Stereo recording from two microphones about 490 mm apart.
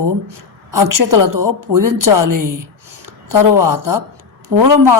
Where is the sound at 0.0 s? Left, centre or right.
Right.